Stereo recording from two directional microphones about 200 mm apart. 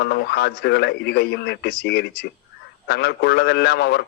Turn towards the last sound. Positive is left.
turn(degrees=55)  # may be behind; listen again after turning